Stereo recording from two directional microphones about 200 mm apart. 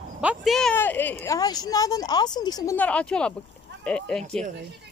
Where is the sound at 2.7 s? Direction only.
5° left (ahead or behind).